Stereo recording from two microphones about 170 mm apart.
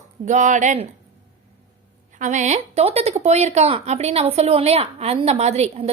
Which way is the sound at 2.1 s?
45° right (ahead or behind).